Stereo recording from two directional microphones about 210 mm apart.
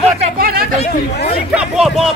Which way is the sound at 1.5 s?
5° right (ahead or behind).